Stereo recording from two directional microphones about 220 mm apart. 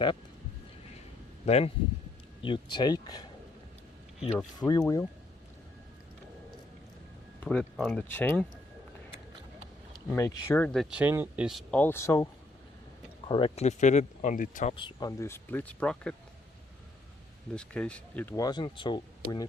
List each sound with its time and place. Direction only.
1.5 s speech: 30° left (ahead or behind)
4.4 s speech: 10° left (ahead or behind)
7.3 s music: 5° left (ahead or behind)
7.6 s speech: centre (ahead or behind)
9.9 s speech: 15° left (ahead or behind)
17.5 s speech: 5° left (ahead or behind); by 19.5 s 20° left (ahead or behind)